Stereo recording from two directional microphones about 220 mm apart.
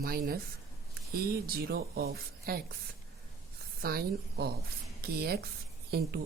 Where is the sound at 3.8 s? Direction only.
45° right (ahead or behind).